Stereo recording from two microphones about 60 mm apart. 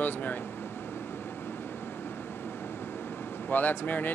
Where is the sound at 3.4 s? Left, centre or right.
Left.